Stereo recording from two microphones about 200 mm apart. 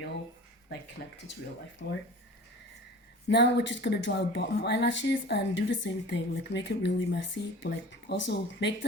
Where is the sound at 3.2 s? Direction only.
60° left (ahead or behind).